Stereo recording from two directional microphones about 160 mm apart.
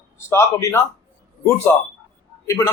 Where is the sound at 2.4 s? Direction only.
20° left (ahead or behind).